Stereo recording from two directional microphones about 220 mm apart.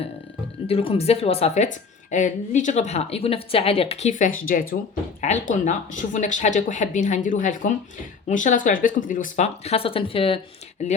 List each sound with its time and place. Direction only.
0.7 s a woman's voice: 25° left (ahead or behind)